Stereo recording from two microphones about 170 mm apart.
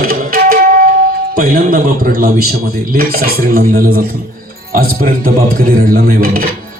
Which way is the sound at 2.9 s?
60° right (ahead or behind).